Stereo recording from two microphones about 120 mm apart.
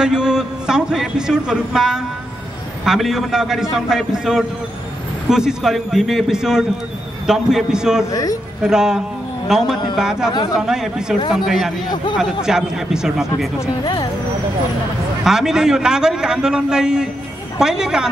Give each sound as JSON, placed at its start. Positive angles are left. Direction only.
{"t": 0.0, "sound": "a man's voice", "side_deg": -5}
{"t": 8.1, "sound": "speech", "side_deg": 30}
{"t": 8.6, "sound": "a man's voice", "side_deg": -5}
{"t": 15.2, "sound": "a man's voice", "side_deg": -5}